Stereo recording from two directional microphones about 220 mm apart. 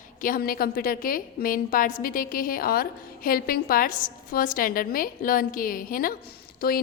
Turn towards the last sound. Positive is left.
turn(degrees=40)  # may be behind; listen again after turning